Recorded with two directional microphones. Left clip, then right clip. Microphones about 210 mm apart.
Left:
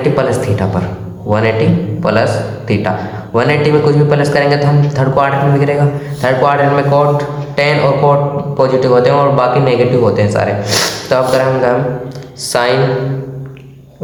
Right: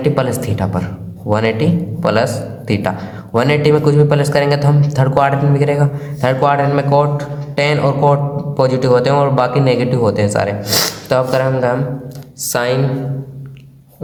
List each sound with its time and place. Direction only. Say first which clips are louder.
0.0 s a woman's voice: left 4 dB; 40° right (ahead or behind)